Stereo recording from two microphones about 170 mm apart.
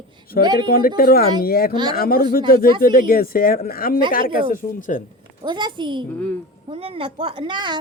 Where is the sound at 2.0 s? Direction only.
60° left (ahead or behind).